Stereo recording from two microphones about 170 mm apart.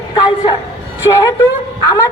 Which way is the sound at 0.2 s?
25° left (ahead or behind).